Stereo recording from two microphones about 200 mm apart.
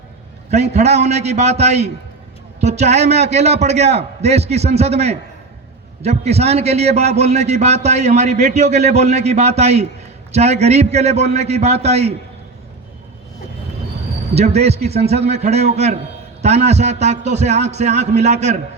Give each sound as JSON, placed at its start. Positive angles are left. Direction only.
{"t": 0.5, "sound": "a man's voice", "side_deg": -35}
{"t": 14.3, "sound": "a man's voice", "side_deg": -30}